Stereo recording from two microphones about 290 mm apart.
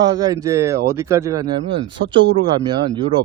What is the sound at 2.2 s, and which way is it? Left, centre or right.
Mantra, right.